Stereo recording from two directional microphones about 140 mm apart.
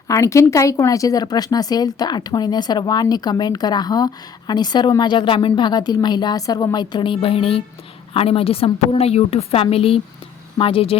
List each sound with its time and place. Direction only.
0.1 s a woman's voice: 20° left (ahead or behind); by 10.9 s 40° left (ahead or behind)